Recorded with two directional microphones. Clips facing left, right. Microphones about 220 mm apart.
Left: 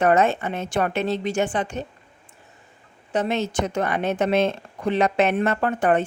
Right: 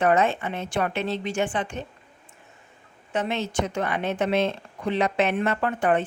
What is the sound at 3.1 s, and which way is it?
A woman's voice, 40° left (ahead or behind).